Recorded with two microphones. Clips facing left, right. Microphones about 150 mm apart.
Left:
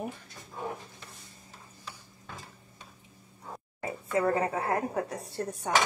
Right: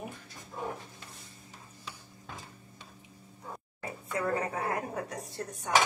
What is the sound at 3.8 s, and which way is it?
A woman's voice, 25° left (ahead or behind).